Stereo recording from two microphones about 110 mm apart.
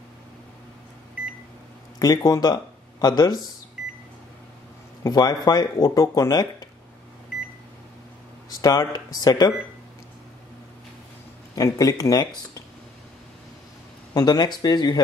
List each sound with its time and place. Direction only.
2.0 s speech: 35° left (ahead or behind)
5.0 s speech: 35° left (ahead or behind)
8.5 s speech: 35° left (ahead or behind)
11.5 s speech: 35° left (ahead or behind)
14.1 s speech: 40° left (ahead or behind)